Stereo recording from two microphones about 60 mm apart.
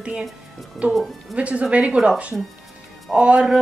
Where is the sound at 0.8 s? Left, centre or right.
Right.